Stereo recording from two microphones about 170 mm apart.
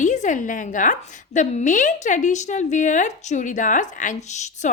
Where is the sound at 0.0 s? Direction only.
45° left (ahead or behind).